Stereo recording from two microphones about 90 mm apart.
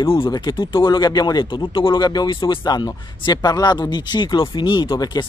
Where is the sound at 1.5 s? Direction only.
70° left (ahead or behind).